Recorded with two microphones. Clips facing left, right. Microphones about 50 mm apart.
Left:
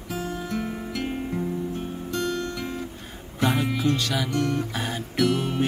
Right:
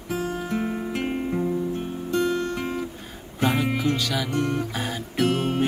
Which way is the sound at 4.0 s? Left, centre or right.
Centre.